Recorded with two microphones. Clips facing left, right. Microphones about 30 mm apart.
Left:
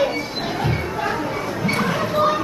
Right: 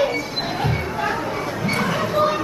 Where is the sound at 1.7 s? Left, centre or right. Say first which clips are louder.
Even; centre.